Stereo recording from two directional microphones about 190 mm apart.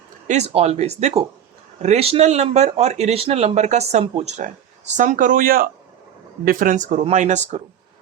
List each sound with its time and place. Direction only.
0.3 s speech: 35° right (ahead or behind)